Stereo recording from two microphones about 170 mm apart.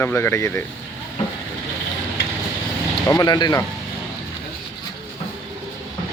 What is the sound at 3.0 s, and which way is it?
Speech, 20° left (ahead or behind).